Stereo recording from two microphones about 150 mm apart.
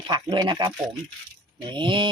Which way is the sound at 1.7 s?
30° right (ahead or behind).